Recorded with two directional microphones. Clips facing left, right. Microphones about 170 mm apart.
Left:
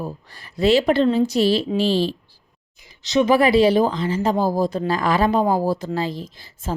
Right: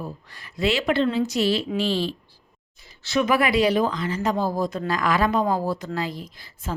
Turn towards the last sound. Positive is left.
turn(degrees=25)  # may be behind; listen again after turning